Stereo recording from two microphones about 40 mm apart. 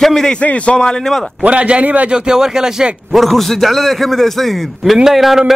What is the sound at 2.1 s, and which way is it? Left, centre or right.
Speech, centre.